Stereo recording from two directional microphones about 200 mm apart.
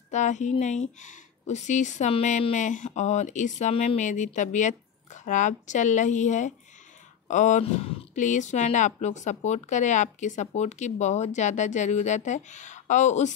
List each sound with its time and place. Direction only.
0.1 s a woman's voice: 35° left (ahead or behind)